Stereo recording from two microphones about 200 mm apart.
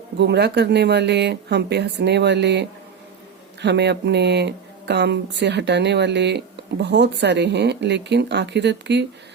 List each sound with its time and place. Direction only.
0.2 s speech: 55° right (ahead or behind)